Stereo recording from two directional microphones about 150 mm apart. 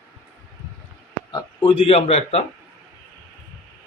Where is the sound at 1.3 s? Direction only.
30° left (ahead or behind).